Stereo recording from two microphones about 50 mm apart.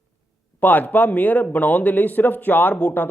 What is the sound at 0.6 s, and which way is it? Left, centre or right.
A man's voice, left.